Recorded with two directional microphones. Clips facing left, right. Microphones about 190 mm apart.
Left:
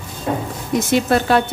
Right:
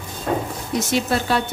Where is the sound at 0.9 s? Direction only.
55° left (ahead or behind).